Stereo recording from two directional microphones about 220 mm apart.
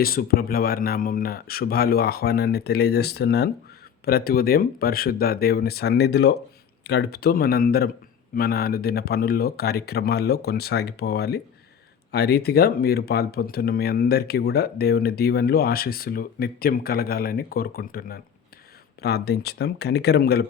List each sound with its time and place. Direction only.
0.0 s speech: 45° left (ahead or behind)